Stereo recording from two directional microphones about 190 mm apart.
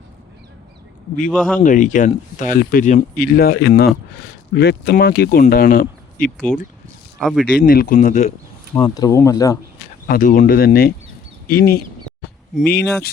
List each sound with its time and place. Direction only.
1.3 s speech: 5° left (ahead or behind)
1.6 s speech: 45° left (ahead or behind)
6.5 s speech: 5° left (ahead or behind)
7.6 s speech: 45° left (ahead or behind)
8.7 s speech: 20° left (ahead or behind)
10.1 s speech: 45° left (ahead or behind)